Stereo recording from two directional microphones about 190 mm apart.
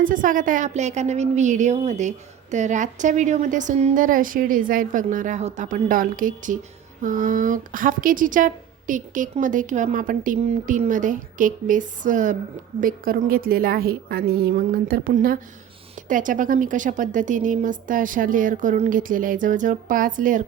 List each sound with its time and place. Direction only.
0.0 s a woman's voice: 45° right (ahead or behind)